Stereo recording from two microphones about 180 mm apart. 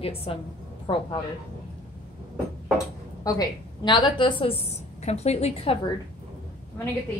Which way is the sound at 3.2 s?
25° left (ahead or behind).